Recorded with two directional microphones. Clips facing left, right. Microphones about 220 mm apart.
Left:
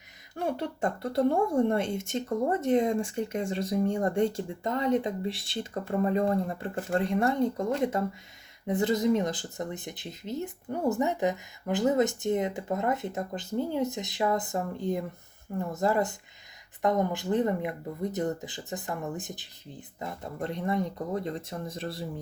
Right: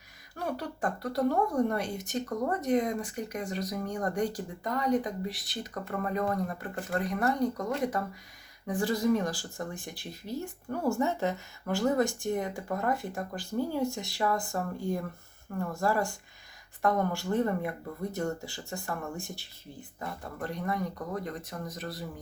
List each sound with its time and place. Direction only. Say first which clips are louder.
0.3 s speech: left 4 dB; 25° left (ahead or behind)